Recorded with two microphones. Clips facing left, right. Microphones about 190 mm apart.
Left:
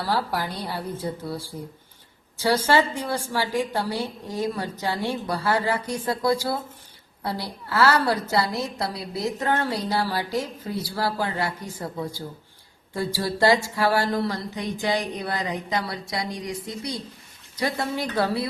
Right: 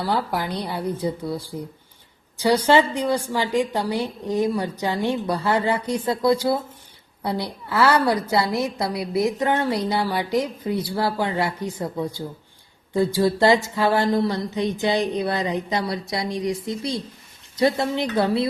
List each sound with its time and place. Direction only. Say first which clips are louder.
0.0 s a woman's voice: right 2 dB; 15° right (ahead or behind)
2.4 s a woman's voice: right 3 dB; 15° right (ahead or behind)
12.9 s a woman's voice: right 7 dB; 20° right (ahead or behind)